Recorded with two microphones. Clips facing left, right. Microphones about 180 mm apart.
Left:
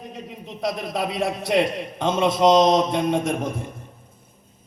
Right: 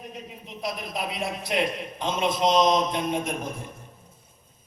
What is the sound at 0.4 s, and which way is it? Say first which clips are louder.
A man's voice: left 6 dB; 70° left (ahead or behind).